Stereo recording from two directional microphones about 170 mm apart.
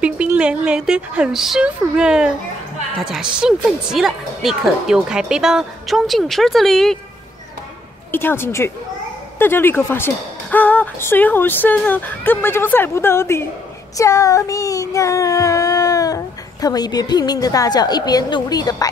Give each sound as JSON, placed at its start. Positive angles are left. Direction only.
{"t": 0.0, "sound": "a woman's voice", "side_deg": -5}
{"t": 8.1, "sound": "speech", "side_deg": 10}
{"t": 13.9, "sound": "child singing", "side_deg": 15}
{"t": 16.6, "sound": "a woman's voice", "side_deg": 25}